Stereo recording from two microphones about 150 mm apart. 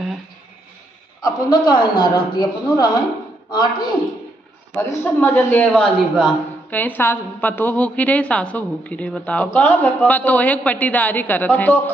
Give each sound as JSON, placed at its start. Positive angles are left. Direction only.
{"t": 1.2, "sound": "a man's voice", "side_deg": 30}
{"t": 5.0, "sound": "a woman's voice", "side_deg": 15}
{"t": 6.7, "sound": "a woman's voice", "side_deg": 10}